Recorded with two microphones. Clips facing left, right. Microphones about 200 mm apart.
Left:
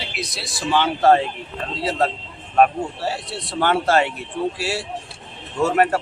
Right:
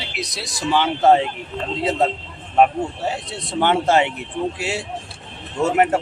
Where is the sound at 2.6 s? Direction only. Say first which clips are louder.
Right 1 dB; 20° right (ahead or behind).